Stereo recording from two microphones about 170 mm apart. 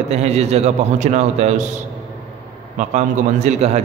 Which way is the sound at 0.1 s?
40° right (ahead or behind).